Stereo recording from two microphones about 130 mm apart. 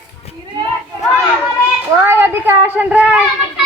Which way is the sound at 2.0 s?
15° right (ahead or behind).